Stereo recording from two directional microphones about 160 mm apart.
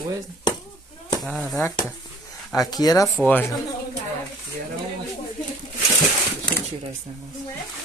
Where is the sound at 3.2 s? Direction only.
10° left (ahead or behind).